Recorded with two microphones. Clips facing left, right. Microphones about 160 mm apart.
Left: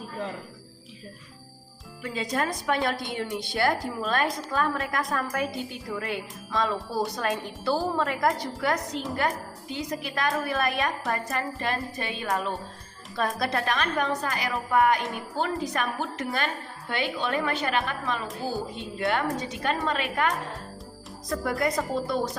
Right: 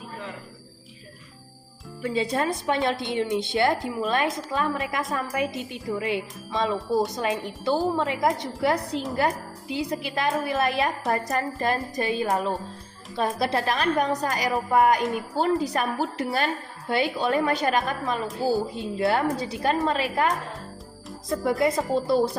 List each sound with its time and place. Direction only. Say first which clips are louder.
2.0 s a woman's voice: right 4 dB; 30° right (ahead or behind)
13.1 s a woman's voice: right 3 dB; 25° right (ahead or behind)
21.2 s speech: right 4 dB; 25° right (ahead or behind)